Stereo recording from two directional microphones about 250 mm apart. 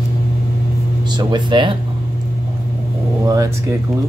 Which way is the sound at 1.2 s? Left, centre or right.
Centre.